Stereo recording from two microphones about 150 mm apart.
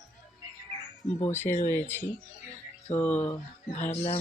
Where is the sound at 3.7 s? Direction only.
50° left (ahead or behind).